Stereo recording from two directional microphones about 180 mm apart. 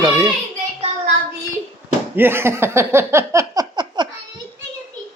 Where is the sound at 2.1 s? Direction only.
10° right (ahead or behind).